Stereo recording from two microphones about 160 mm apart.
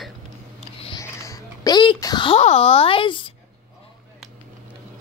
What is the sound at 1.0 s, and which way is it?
A child's voice, 20° left (ahead or behind).